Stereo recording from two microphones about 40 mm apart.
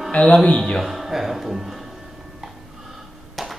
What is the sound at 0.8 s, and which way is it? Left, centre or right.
Speech, centre.